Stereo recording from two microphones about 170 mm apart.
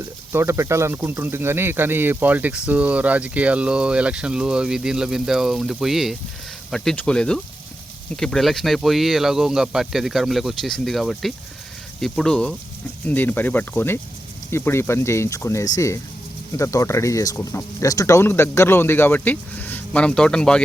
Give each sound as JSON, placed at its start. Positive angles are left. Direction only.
{"t": 0.3, "sound": "speech", "side_deg": -15}